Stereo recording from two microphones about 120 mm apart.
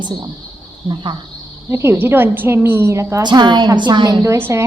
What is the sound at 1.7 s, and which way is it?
A woman's voice, 20° right (ahead or behind).